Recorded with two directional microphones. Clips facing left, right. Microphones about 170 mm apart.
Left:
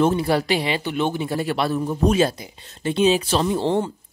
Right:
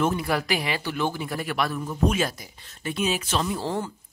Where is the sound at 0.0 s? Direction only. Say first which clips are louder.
Left 6 dB; 30° left (ahead or behind).